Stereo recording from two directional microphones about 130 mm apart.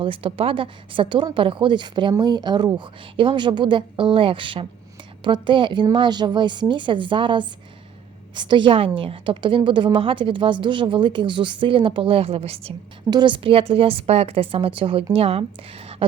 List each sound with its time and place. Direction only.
0.0 s a woman's voice: 40° right (ahead or behind)
13.1 s a woman's voice: 35° right (ahead or behind)